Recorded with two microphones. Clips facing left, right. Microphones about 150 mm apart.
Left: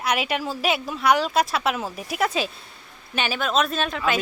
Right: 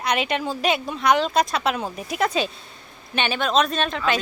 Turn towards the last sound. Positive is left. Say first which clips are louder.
# right 1 dB
turn(degrees=5)  # may be behind; listen again after turning